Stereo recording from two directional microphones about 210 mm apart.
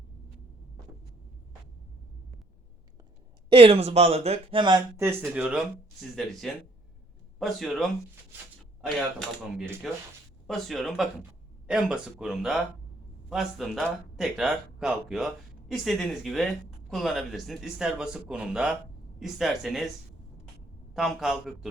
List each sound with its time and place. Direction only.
3.5 s speech: 30° right (ahead or behind); by 19.9 s centre (ahead or behind)
20.9 s speech: centre (ahead or behind)